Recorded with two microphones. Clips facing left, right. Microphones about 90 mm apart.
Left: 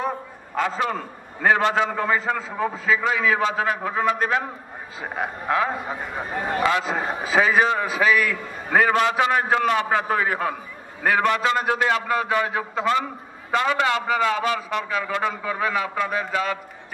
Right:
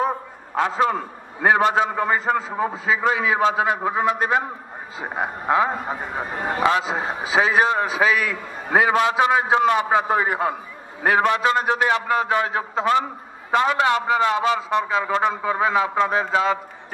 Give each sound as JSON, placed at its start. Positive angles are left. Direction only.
{"t": 0.6, "sound": "a man's voice", "side_deg": -30}
{"t": 2.7, "sound": "a man's voice", "side_deg": -5}